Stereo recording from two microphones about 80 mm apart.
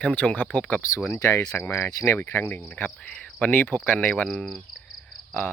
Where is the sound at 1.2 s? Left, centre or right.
Left.